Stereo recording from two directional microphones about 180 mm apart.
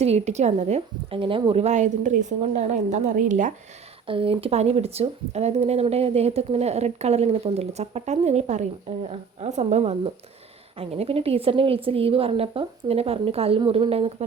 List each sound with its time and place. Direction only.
0.0 s speech: 35° right (ahead or behind)
4.0 s speech: 30° right (ahead or behind)